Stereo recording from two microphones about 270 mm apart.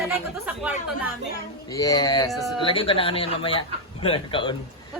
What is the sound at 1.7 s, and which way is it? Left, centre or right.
Speech, centre.